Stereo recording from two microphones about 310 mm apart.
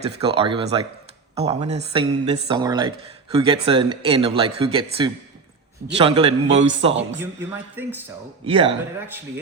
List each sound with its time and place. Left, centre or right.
0.2 s a man's voice: centre
7.2 s speech: centre